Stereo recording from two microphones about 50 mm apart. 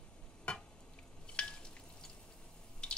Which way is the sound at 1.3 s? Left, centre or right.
Centre.